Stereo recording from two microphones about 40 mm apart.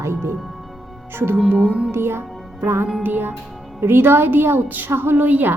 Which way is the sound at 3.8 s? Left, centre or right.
Right.